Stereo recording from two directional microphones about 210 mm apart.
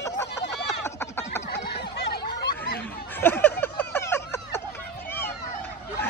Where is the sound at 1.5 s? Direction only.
50° left (ahead or behind).